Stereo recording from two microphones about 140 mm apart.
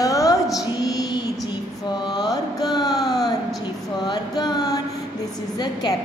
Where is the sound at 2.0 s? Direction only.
30° left (ahead or behind).